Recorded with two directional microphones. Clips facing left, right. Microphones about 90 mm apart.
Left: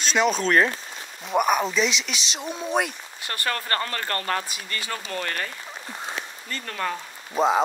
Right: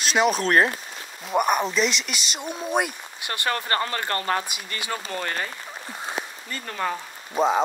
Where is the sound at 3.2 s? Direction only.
20° right (ahead or behind).